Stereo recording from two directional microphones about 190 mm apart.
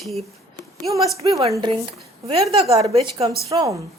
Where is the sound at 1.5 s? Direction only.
25° right (ahead or behind).